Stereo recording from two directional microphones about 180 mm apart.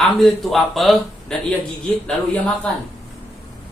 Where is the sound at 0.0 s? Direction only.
Centre (ahead or behind).